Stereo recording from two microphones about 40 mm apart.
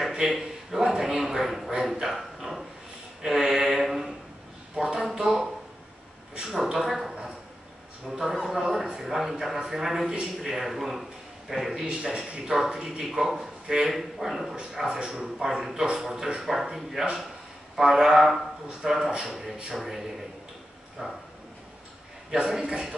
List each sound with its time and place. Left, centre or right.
0.1 s a sound: centre
0.4 s a man's voice: centre
3.2 s a sound: centre
6.9 s a man's voice: centre
11.8 s speech: centre
17.7 s music: centre
18.8 s speech: centre
19.2 s music: centre
21.0 s speech: centre
22.3 s speech: centre